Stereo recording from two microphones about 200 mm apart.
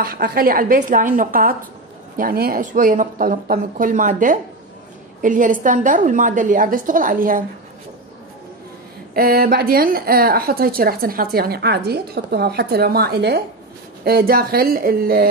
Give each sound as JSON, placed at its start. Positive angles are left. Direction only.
{"t": 0.0, "sound": "a woman's voice", "side_deg": -45}
{"t": 9.1, "sound": "a woman's voice", "side_deg": -45}